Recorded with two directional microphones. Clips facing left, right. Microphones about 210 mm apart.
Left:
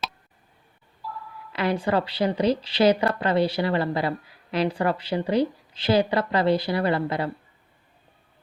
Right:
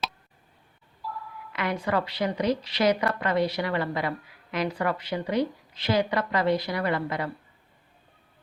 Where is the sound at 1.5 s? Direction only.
30° left (ahead or behind).